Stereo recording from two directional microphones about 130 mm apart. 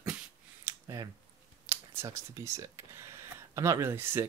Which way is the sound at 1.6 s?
20° right (ahead or behind).